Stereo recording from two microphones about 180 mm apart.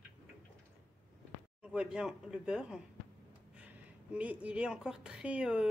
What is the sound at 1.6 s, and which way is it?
A woman's voice, 5° right (ahead or behind).